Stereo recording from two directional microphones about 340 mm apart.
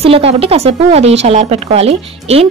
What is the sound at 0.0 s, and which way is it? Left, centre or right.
Speech, centre.